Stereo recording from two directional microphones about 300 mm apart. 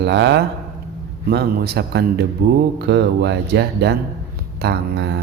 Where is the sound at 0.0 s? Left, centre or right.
Right.